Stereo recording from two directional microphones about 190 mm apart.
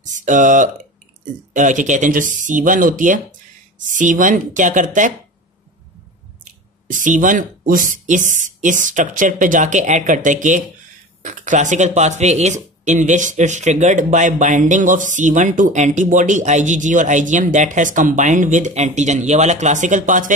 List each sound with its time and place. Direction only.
0.1 s speech: 40° right (ahead or behind)
6.9 s speech: 40° right (ahead or behind)